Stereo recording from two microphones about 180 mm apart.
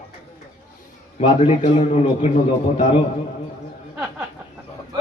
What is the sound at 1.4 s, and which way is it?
Speech, 35° left (ahead or behind).